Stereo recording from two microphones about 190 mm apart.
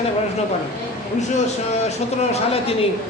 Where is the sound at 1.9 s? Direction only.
35° left (ahead or behind).